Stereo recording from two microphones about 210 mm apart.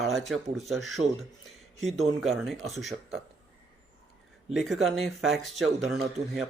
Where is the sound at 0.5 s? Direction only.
Centre (ahead or behind).